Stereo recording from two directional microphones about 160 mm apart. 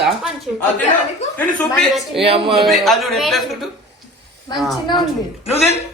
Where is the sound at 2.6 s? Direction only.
Centre (ahead or behind).